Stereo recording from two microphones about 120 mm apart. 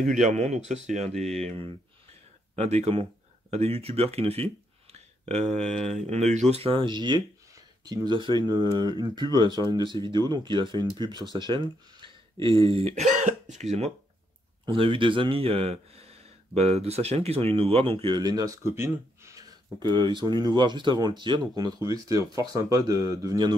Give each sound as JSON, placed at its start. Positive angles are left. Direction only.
{"t": 0.0, "sound": "speech", "side_deg": -90}
{"t": 5.2, "sound": "speech", "side_deg": -65}
{"t": 12.6, "sound": "speech", "side_deg": -55}
{"t": 14.7, "sound": "speech", "side_deg": -45}
{"t": 19.8, "sound": "speech", "side_deg": -40}